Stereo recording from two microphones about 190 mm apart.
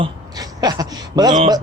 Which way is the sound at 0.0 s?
20° right (ahead or behind).